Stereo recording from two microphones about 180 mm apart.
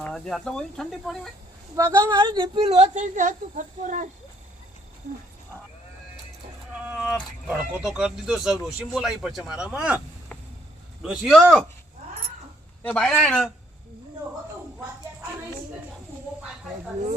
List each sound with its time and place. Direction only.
0.0 s speech: centre (ahead or behind)
1.7 s a woman's voice: 15° right (ahead or behind); by 4.1 s 45° right (ahead or behind)
6.7 s vehicle: 5° right (ahead or behind)
7.4 s speech: 10° right (ahead or behind)
11.0 s speech: 5° right (ahead or behind)
12.8 s speech: 5° left (ahead or behind)